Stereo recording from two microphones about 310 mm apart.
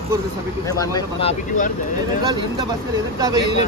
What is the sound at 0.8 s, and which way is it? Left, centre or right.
Speech, centre.